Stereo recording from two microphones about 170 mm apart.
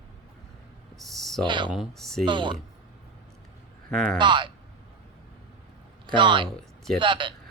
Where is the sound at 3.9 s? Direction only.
5° left (ahead or behind).